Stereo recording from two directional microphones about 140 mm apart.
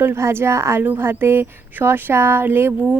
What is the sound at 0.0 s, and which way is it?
A woman's voice, 20° right (ahead or behind).